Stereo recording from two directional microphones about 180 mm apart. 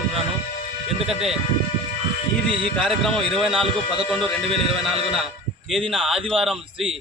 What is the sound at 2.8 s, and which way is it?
A man's voice, centre (ahead or behind).